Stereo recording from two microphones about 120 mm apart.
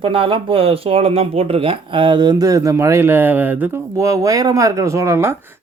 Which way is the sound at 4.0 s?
25° right (ahead or behind).